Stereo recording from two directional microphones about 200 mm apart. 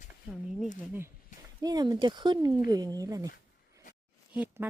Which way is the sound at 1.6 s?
20° right (ahead or behind).